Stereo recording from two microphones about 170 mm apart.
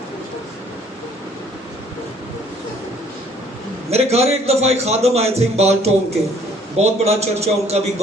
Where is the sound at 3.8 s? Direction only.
40° right (ahead or behind).